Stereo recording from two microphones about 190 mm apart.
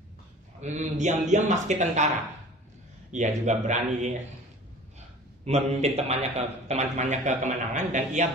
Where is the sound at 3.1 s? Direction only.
40° right (ahead or behind).